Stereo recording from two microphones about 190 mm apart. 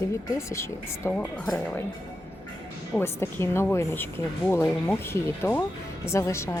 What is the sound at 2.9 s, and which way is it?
Speech, 10° left (ahead or behind).